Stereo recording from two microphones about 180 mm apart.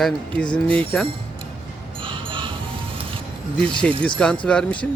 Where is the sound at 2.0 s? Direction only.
30° right (ahead or behind).